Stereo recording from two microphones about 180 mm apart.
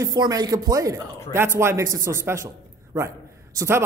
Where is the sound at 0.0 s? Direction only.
20° right (ahead or behind).